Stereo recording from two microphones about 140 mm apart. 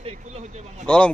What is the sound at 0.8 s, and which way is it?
Speech, 10° left (ahead or behind).